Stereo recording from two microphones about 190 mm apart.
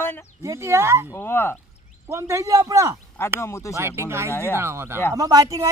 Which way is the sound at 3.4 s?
15° left (ahead or behind).